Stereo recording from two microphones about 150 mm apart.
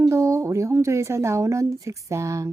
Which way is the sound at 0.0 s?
20° right (ahead or behind).